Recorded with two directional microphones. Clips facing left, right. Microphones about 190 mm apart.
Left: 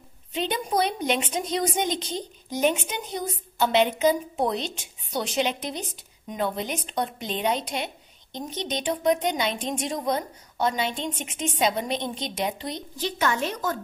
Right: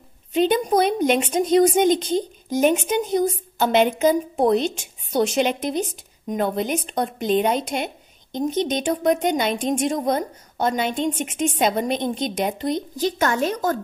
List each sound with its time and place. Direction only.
0.3 s a woman's voice: 50° right (ahead or behind)